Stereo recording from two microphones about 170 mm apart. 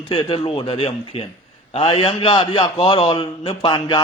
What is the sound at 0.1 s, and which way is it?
A man's voice, 30° left (ahead or behind).